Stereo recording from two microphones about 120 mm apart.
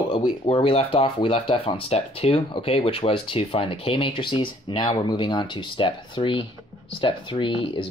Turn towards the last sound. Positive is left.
turn(degrees=45)  # may be behind; listen again after turning